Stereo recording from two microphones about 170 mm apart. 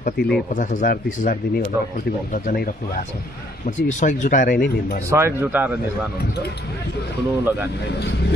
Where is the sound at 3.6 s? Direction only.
45° left (ahead or behind).